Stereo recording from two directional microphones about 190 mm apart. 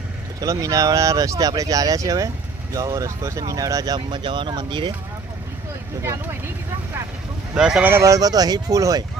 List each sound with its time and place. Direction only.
0.4 s speech: 15° right (ahead or behind)
6.0 s speech: 10° right (ahead or behind)
7.5 s speech: 5° right (ahead or behind)